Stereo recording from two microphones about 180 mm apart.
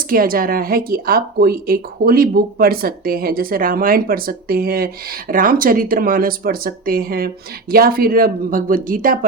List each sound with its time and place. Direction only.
0.1 s speech: 55° right (ahead or behind)